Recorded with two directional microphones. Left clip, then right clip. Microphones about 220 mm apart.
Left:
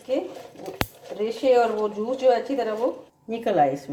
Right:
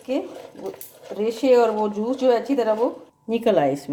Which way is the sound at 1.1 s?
40° right (ahead or behind).